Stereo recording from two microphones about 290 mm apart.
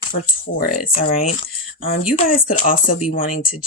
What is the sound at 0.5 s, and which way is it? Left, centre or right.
Speech, left.